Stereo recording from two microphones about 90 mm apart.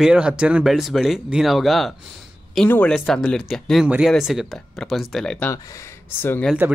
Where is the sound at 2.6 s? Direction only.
20° left (ahead or behind).